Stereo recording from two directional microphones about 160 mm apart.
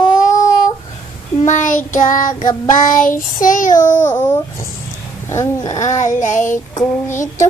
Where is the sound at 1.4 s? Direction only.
50° left (ahead or behind).